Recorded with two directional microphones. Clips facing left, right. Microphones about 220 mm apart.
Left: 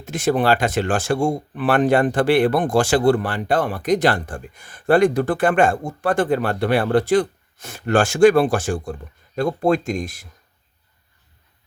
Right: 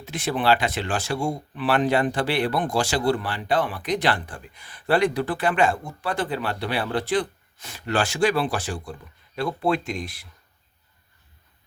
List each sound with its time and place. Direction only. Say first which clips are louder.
0.0 s speech: left 6 dB; 45° left (ahead or behind)